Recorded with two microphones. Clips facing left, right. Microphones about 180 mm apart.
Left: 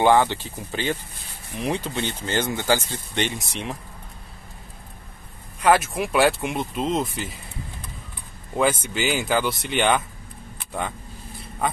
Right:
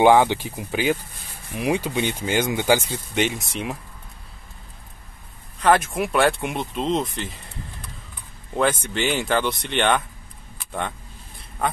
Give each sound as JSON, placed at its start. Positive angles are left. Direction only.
{"t": 0.0, "sound": "speech", "side_deg": -15}
{"t": 5.6, "sound": "speech", "side_deg": 5}
{"t": 8.8, "sound": "speech", "side_deg": 5}